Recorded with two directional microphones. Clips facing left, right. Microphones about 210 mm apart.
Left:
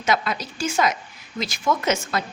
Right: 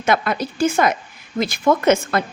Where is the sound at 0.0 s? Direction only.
55° right (ahead or behind).